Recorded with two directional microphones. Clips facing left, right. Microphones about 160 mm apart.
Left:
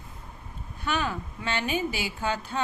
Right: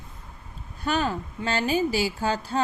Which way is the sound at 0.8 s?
40° right (ahead or behind).